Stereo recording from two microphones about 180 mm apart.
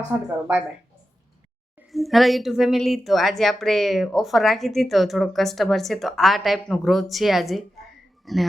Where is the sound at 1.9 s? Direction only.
Centre (ahead or behind).